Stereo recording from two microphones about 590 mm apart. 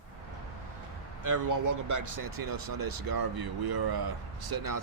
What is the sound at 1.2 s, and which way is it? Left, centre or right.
Speech, right.